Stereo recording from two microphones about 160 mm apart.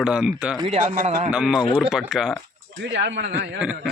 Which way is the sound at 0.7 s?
60° right (ahead or behind).